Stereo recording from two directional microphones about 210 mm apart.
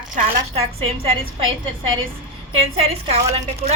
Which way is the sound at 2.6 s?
30° right (ahead or behind).